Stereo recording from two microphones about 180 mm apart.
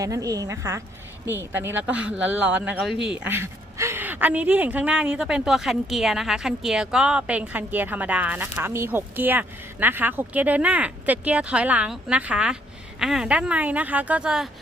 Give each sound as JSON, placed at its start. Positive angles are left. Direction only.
{"t": 0.0, "sound": "a woman's voice", "side_deg": -20}